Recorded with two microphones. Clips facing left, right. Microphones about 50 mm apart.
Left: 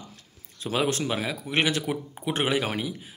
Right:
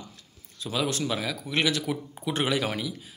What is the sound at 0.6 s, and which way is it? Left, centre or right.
Speech, left.